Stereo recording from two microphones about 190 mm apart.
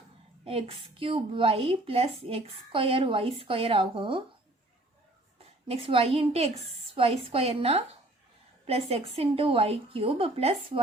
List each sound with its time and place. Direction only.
0.4 s a woman's voice: 30° right (ahead or behind)
5.4 s a woman's voice: 30° right (ahead or behind)